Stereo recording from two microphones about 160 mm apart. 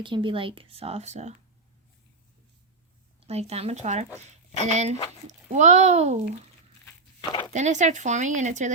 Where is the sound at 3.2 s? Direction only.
40° right (ahead or behind).